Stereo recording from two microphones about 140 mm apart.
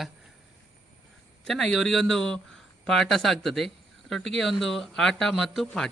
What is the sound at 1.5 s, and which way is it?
Speech, 5° left (ahead or behind).